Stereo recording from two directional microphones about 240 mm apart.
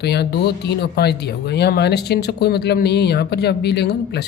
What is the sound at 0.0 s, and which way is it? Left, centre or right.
A woman's voice, left.